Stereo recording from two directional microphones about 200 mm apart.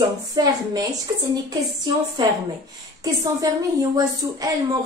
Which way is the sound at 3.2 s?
20° right (ahead or behind).